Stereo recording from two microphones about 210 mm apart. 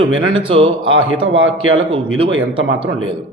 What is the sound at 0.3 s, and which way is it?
Speech, 25° right (ahead or behind).